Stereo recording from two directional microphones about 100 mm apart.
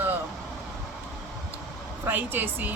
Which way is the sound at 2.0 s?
20° right (ahead or behind).